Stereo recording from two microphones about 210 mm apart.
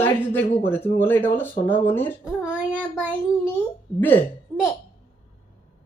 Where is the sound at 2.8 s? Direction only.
5° right (ahead or behind).